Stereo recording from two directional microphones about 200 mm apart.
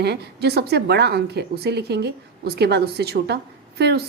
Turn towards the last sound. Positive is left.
turn(degrees=-55)  # may be behind; listen again after turning